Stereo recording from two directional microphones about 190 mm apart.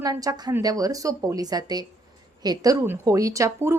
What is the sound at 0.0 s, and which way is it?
A woman's voice, 20° right (ahead or behind).